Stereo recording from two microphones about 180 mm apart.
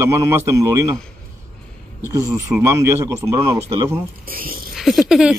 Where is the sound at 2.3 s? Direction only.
10° right (ahead or behind).